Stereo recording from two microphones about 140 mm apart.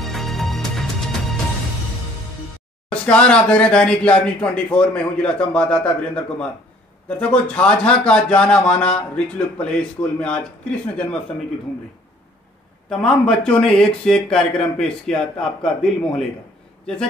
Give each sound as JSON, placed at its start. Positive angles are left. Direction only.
{"t": 0.0, "sound": "music", "side_deg": 0}
{"t": 2.9, "sound": "speech", "side_deg": 10}
{"t": 13.0, "sound": "speech", "side_deg": 5}